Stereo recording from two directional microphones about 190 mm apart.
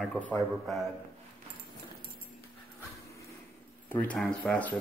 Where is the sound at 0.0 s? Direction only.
5° left (ahead or behind).